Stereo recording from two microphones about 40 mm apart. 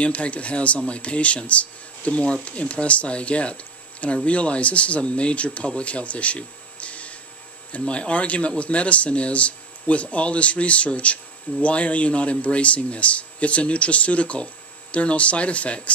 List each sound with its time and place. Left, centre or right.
0.0 s speech: left